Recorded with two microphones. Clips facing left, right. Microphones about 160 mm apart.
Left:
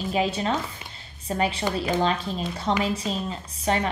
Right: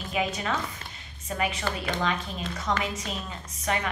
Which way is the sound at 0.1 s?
30° left (ahead or behind).